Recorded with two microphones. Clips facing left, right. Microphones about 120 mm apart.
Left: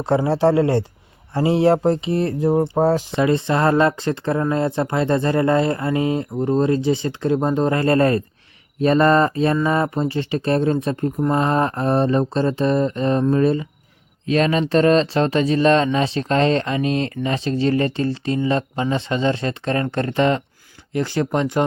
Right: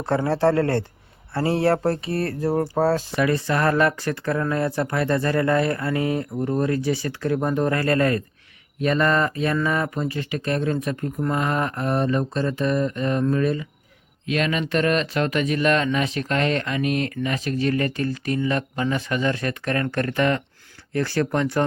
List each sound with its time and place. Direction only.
0.0 s speech: 15° left (ahead or behind)